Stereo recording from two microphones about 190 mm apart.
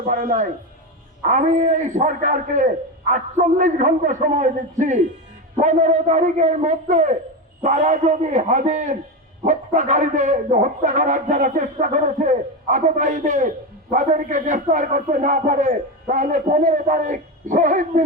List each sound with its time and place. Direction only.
0.0 s a man's voice: 45° right (ahead or behind)